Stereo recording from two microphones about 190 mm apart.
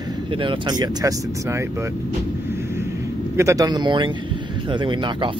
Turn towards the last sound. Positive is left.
turn(degrees=-25)  # may be behind; listen again after turning